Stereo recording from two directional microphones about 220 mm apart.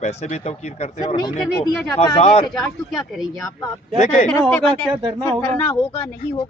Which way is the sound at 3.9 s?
30° left (ahead or behind).